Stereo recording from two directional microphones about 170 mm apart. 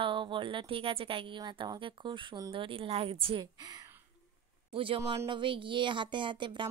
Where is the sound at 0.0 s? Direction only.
30° right (ahead or behind).